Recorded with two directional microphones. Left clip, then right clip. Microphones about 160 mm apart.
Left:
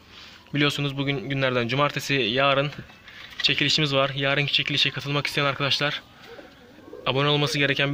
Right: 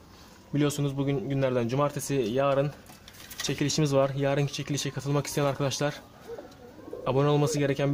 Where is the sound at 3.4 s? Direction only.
15° right (ahead or behind).